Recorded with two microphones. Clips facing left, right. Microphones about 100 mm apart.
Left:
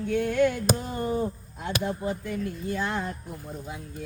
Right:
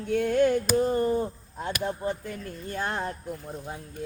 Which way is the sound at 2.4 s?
45° right (ahead or behind).